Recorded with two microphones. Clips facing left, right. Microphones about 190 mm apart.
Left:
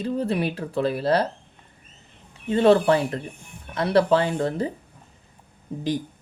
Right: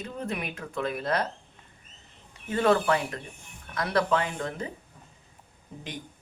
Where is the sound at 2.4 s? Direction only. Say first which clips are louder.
Left 6 dB; 30° left (ahead or behind).